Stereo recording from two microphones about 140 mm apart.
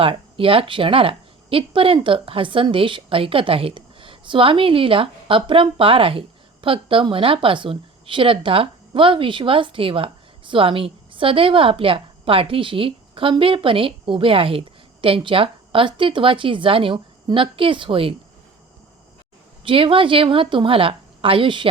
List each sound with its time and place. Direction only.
0.0 s a woman's voice: 40° right (ahead or behind)
19.6 s a woman's voice: 40° right (ahead or behind)